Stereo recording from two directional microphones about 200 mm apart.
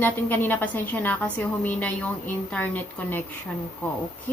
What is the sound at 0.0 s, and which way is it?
A woman's voice, 10° left (ahead or behind).